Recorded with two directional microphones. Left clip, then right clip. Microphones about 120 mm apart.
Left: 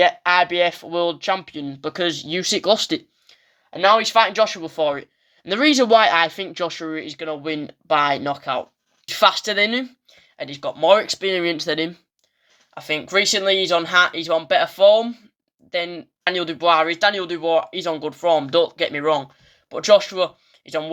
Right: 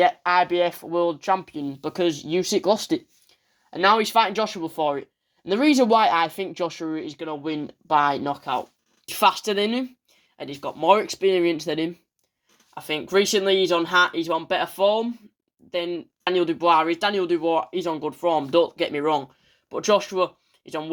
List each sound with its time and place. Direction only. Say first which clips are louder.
0.0 s speech: left 3 dB; 50° right (ahead or behind); by 3.0 s 25° right (ahead or behind)
3.7 s speech: left 3 dB; 75° right (ahead or behind); by 10.2 s 35° right (ahead or behind)
10.3 s speech: left 4 dB; 50° right (ahead or behind); by 11.9 s 30° right (ahead or behind)
12.7 s speech: left 2 dB; 45° right (ahead or behind)
18.6 s speech: left 3 dB; 55° right (ahead or behind); by 20.9 s 40° right (ahead or behind)